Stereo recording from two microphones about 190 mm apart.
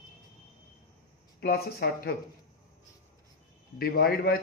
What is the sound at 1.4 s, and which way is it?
Speech, 55° left (ahead or behind).